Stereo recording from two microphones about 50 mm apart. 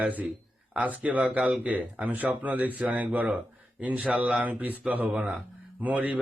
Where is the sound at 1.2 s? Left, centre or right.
Right.